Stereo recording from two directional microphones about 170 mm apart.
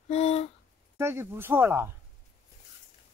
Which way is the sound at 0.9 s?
15° right (ahead or behind).